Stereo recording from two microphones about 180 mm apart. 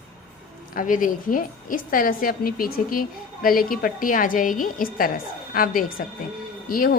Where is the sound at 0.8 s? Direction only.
45° left (ahead or behind).